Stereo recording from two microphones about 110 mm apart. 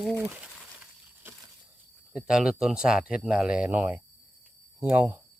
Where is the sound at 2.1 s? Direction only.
10° right (ahead or behind).